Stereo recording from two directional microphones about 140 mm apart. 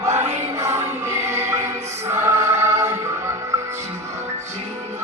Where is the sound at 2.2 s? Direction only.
20° right (ahead or behind).